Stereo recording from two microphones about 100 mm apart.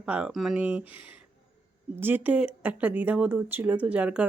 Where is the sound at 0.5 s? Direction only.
15° right (ahead or behind).